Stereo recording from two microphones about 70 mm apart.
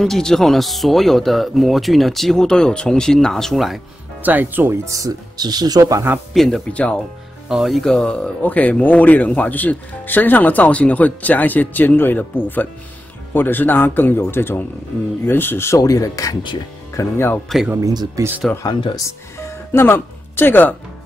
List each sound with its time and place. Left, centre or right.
0.0 s speech: centre
4.2 s speech: right
4.8 s speech: right
5.4 s speech: right
6.3 s speech: centre
6.7 s speech: centre
7.4 s speech: centre; by 15.8 s left
15.8 s speech: left
17.5 s speech: centre
17.8 s speech: right
18.5 s speech: centre
19.0 s music: left